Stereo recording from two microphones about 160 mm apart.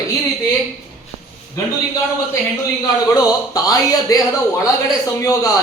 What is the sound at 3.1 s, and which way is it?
A man's voice, 20° left (ahead or behind).